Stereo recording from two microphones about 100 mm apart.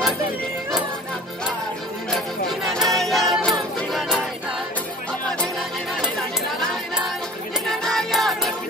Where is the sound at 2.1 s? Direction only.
Centre (ahead or behind).